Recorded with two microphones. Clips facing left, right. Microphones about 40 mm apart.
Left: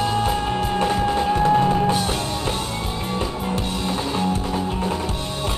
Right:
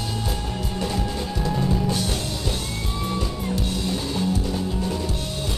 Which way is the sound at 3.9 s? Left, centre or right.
Left.